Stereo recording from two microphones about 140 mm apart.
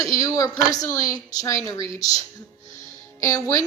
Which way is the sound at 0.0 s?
25° left (ahead or behind).